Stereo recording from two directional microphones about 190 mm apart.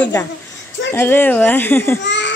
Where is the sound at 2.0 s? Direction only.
70° left (ahead or behind).